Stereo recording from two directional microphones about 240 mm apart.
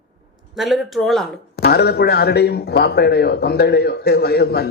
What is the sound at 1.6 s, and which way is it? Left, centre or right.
Speech, left.